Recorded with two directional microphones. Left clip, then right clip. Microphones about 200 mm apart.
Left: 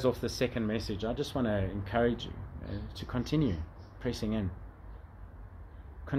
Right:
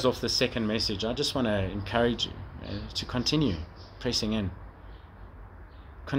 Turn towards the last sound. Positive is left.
turn(degrees=0)  # may be behind; listen again after turning